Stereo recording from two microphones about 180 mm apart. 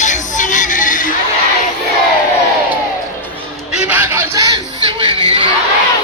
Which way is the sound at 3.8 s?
10° right (ahead or behind).